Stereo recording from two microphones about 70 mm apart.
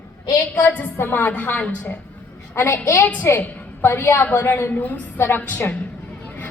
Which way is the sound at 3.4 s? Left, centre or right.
Left.